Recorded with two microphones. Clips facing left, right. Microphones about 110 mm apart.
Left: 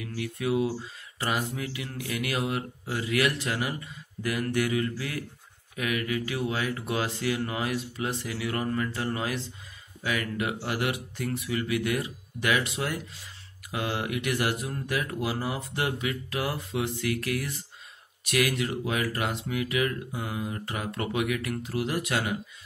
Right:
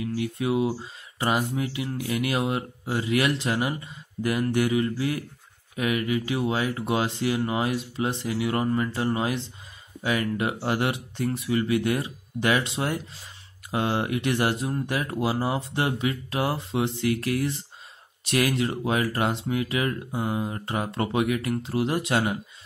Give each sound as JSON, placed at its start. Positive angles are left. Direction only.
{"t": 0.0, "sound": "speech", "side_deg": -25}